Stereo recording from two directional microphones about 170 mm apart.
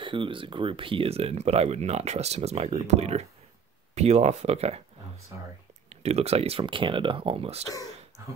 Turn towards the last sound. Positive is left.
turn(degrees=-35)  # may be behind; listen again after turning